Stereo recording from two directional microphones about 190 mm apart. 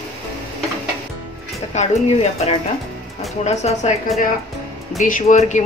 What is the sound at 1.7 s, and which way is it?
Speech, 40° left (ahead or behind).